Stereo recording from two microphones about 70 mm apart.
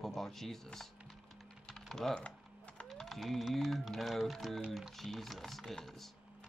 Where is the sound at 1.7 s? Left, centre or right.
Centre.